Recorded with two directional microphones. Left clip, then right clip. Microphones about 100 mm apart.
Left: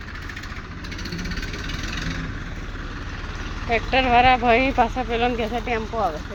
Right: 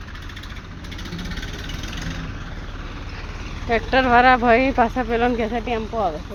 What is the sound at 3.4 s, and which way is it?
Vehicle, centre (ahead or behind).